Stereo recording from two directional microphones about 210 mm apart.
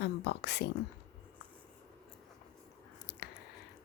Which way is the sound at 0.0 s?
55° left (ahead or behind).